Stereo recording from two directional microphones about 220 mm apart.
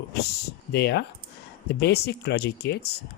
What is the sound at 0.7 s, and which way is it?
Speech, 50° left (ahead or behind).